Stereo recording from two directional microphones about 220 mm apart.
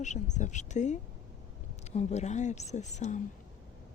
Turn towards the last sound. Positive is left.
turn(degrees=30)  # may be behind; listen again after turning